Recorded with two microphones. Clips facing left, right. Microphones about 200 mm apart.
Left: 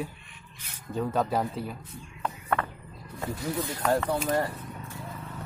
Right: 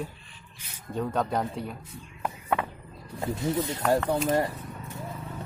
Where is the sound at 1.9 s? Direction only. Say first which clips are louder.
Even; 10° right (ahead or behind).